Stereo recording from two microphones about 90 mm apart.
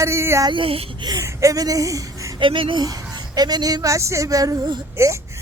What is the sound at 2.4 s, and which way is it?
Speech, 70° right (ahead or behind).